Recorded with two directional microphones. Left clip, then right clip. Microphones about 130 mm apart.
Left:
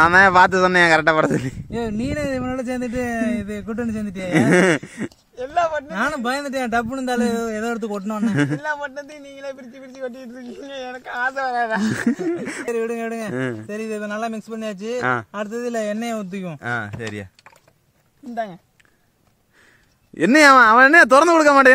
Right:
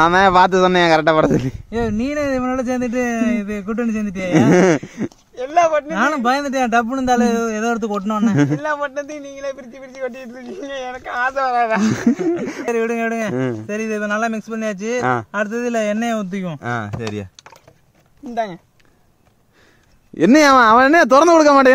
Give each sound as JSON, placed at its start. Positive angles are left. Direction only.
{"t": 0.0, "sound": "a man's voice", "side_deg": 0}
{"t": 3.1, "sound": "a man's voice", "side_deg": 20}
{"t": 3.8, "sound": "a man's voice", "side_deg": 0}
{"t": 5.3, "sound": "speech", "side_deg": -25}
{"t": 5.9, "sound": "a man's voice", "side_deg": 25}
{"t": 8.5, "sound": "a man's voice", "side_deg": -25}
{"t": 11.9, "sound": "a man's voice", "side_deg": 0}
{"t": 15.6, "sound": "a man's voice", "side_deg": 20}
{"t": 16.5, "sound": "a man's voice", "side_deg": 0}
{"t": 18.3, "sound": "speech", "side_deg": -50}
{"t": 20.2, "sound": "a man's voice", "side_deg": -5}